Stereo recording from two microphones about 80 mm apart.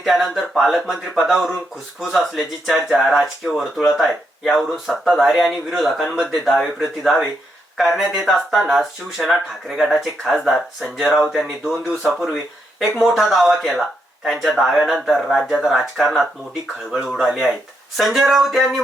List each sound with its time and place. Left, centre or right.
0.0 s speech: centre